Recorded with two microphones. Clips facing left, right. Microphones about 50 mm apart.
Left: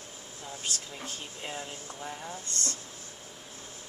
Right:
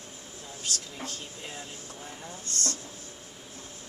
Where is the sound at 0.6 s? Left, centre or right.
Centre.